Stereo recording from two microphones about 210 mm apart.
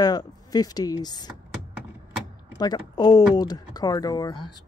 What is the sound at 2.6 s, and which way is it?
Speech, 20° left (ahead or behind).